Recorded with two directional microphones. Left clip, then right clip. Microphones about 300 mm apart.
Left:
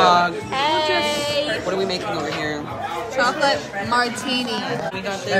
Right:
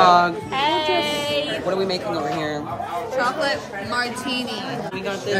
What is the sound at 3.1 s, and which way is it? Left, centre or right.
Speech, centre.